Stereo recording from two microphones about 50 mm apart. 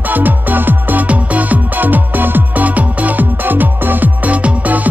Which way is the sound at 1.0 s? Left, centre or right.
Right.